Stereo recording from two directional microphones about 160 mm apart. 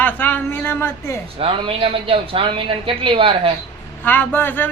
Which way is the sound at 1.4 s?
35° right (ahead or behind).